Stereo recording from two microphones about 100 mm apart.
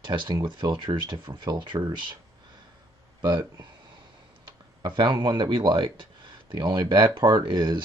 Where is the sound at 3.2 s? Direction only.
40° right (ahead or behind).